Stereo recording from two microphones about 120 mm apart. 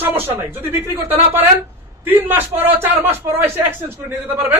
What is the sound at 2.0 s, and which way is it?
Speech, 15° right (ahead or behind).